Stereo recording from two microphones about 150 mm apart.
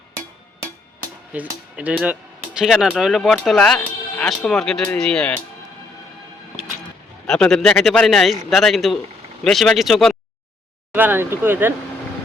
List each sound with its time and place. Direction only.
1.3 s a man's voice: 10° right (ahead or behind); by 5.4 s 5° left (ahead or behind)
7.3 s a man's voice: 5° left (ahead or behind)
10.9 s speech: 15° right (ahead or behind)